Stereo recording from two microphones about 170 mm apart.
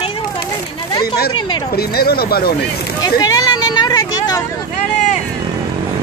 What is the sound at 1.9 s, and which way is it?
Speech, 65° left (ahead or behind).